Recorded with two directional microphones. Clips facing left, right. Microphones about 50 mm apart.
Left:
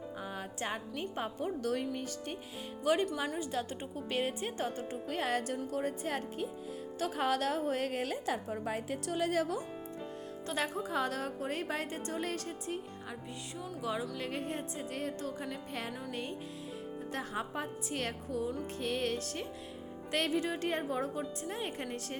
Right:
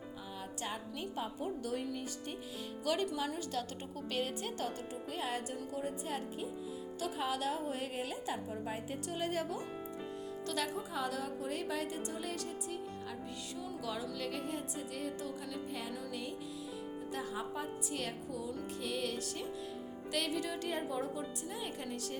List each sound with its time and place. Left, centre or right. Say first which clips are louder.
0.3 s speech: left 2 dB; left
1.4 s a woman's voice: left 6 dB; left
2.8 s a woman's voice: left 4 dB; left
4.1 s music: left 3 dB; left
5.0 s a woman's voice: left 5 dB; left
10.5 s music: left 3 dB; left
10.8 s a woman's voice: left 4 dB; left
13.8 s music: left 4 dB; left
17.1 s a woman's voice: left 3 dB; left